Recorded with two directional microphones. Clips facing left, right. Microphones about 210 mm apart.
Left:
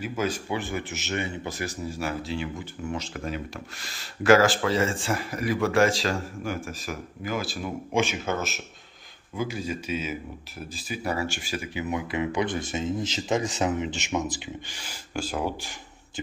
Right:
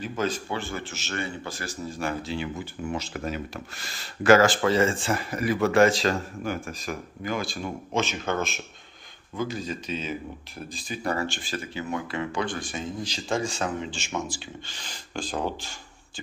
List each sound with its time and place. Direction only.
0.0 s speech: 10° left (ahead or behind)
1.9 s speech: 5° left (ahead or behind)